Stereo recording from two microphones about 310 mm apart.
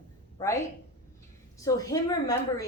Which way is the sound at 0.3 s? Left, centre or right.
Centre.